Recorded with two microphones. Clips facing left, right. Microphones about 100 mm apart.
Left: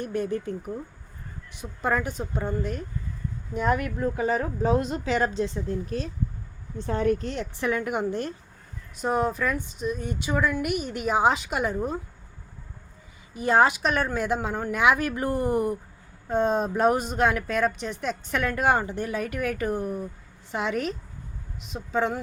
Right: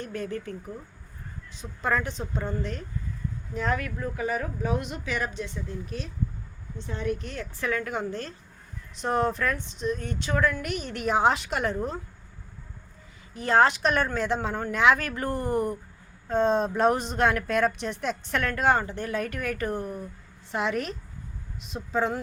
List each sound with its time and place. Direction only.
0.0 s speech: 15° left (ahead or behind)
1.6 s speech: 10° left (ahead or behind); by 7.3 s 40° left (ahead or behind)
7.6 s speech: 20° left (ahead or behind)
13.3 s speech: 10° left (ahead or behind)